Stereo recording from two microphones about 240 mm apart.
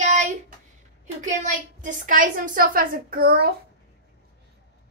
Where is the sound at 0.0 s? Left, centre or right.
Right.